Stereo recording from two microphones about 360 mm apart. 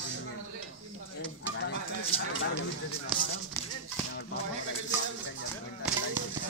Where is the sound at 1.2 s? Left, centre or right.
Left.